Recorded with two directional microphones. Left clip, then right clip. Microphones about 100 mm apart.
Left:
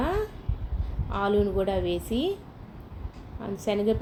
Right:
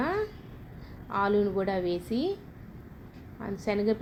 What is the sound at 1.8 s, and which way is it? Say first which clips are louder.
Speech: left 2 dB; 35° right (ahead or behind).